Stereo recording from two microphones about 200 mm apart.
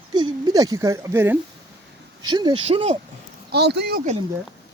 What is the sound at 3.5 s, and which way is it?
Speech, 55° right (ahead or behind).